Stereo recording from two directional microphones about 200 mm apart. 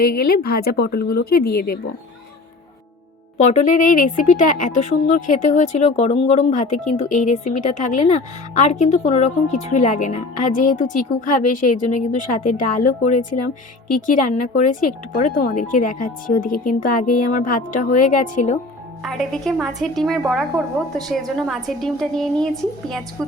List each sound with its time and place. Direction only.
0.0 s speech: 50° left (ahead or behind)
3.3 s a woman's voice: 35° left (ahead or behind)
19.0 s a woman's voice: centre (ahead or behind)